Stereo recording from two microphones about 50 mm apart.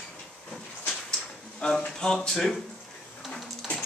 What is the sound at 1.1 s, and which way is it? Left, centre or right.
Speech, centre.